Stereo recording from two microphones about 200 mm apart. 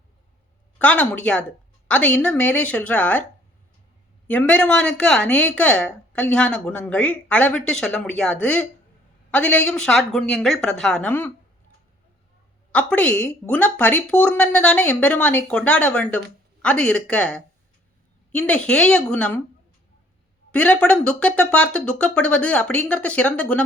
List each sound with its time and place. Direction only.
0.8 s speech: 5° left (ahead or behind)
4.3 s speech: 5° left (ahead or behind)
12.7 s speech: 5° left (ahead or behind)
20.5 s speech: 5° left (ahead or behind)